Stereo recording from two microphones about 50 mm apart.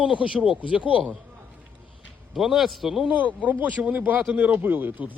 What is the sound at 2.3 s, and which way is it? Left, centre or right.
Speech, centre.